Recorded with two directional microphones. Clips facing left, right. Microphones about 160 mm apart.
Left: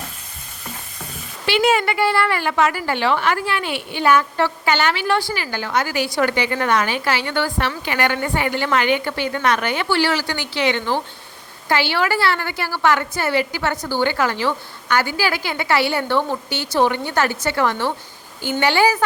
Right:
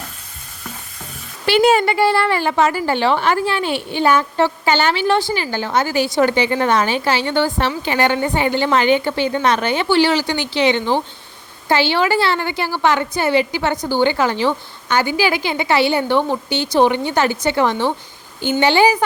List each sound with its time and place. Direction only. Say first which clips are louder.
1.5 s a woman's voice: right 4 dB; 35° right (ahead or behind); by 19.0 s 20° right (ahead or behind)